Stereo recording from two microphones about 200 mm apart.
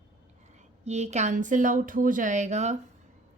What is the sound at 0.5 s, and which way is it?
Speech, 35° right (ahead or behind).